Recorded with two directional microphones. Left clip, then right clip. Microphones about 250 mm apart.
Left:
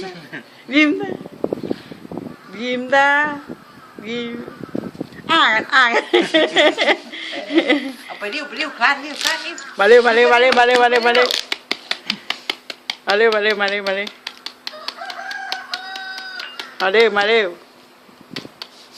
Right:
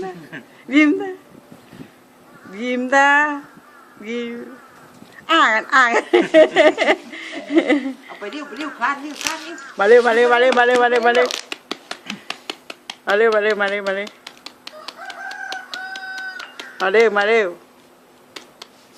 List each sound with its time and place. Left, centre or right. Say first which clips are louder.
0.3 s speech: even; centre
2.6 s a woman's voice: even; centre
8.0 s speech: left 5 dB; left
9.7 s a man's voice: left 1 dB; centre
12.0 s a sound: left 4 dB; centre